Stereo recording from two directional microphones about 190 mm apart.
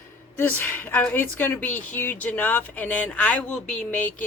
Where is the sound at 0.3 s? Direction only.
10° left (ahead or behind).